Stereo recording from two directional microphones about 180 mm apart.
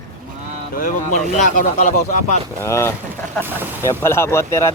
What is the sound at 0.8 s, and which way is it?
Speech, 45° left (ahead or behind).